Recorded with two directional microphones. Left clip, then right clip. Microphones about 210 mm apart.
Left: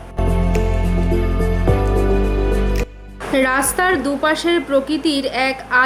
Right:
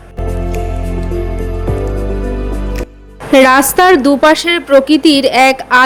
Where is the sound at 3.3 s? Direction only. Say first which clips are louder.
Right 10 dB; 40° right (ahead or behind).